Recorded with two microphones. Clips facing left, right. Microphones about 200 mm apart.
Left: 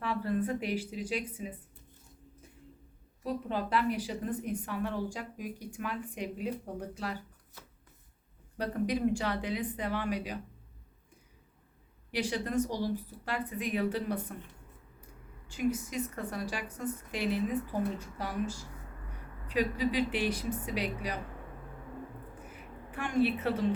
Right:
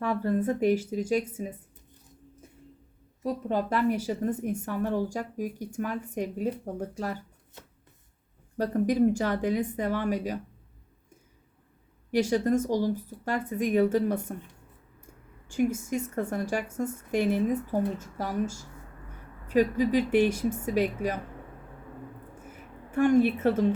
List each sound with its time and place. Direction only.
0.0 s a woman's voice: 45° right (ahead or behind)
3.2 s a woman's voice: 45° right (ahead or behind)
8.5 s a woman's voice: 45° right (ahead or behind)
12.1 s a woman's voice: 45° right (ahead or behind)
15.4 s a woman's voice: 50° right (ahead or behind)
22.5 s a woman's voice: 45° right (ahead or behind)